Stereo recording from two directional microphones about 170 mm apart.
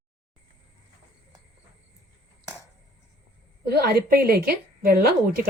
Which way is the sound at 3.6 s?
70° right (ahead or behind).